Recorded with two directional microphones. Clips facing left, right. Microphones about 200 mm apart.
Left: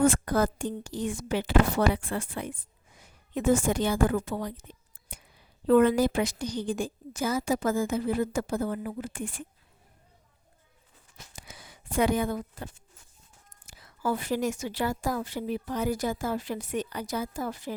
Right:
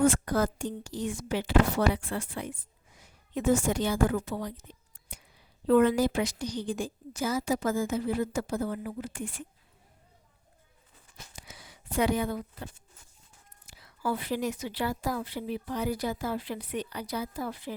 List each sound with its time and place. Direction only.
0.0 s a woman's voice: 50° left (ahead or behind)
11.3 s a sound: 50° left (ahead or behind)
13.7 s a woman's voice: 45° left (ahead or behind)